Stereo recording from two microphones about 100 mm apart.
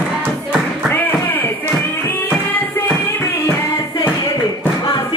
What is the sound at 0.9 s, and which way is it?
Music, 20° left (ahead or behind).